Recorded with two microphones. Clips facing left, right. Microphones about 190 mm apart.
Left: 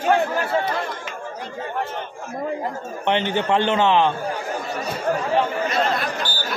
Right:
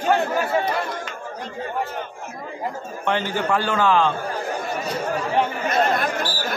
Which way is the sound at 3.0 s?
20° left (ahead or behind).